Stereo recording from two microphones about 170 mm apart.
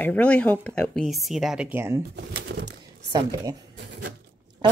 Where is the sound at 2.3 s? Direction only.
85° right.